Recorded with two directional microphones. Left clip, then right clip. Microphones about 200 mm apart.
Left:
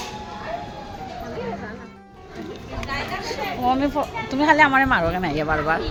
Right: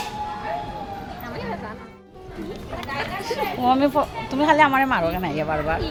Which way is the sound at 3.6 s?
15° right (ahead or behind).